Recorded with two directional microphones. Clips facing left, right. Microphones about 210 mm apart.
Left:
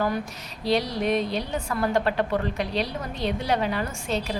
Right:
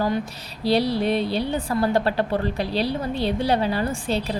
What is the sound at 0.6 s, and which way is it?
A woman's voice, 35° right (ahead or behind).